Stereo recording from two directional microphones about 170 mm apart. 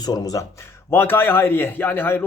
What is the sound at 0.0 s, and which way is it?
A man's voice, 20° left (ahead or behind).